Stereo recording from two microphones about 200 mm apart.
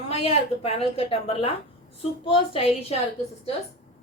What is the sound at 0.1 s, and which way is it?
A woman's voice, 30° left (ahead or behind).